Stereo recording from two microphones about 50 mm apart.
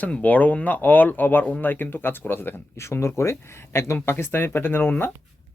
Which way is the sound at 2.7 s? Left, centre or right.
Left.